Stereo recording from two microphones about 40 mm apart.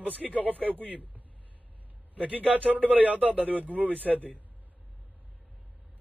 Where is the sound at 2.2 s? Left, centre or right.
Right.